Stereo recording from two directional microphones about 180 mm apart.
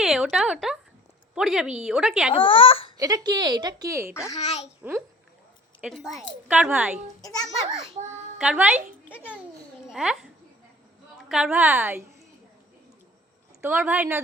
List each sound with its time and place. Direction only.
0.0 s a woman's voice: centre (ahead or behind)
2.3 s speech: 30° left (ahead or behind)
3.0 s a woman's voice: 20° right (ahead or behind)
4.4 s speech: 35° left (ahead or behind)
4.8 s a child's voice: 10° right (ahead or behind)
5.8 s a woman's voice: centre (ahead or behind)
7.2 s a child's voice: 20° left (ahead or behind)
8.1 s a woman's voice: 5° right (ahead or behind)
9.0 s a child's voice: 10° left (ahead or behind)
9.9 s a woman's voice: 5° right (ahead or behind)
13.6 s a woman's voice: 10° right (ahead or behind)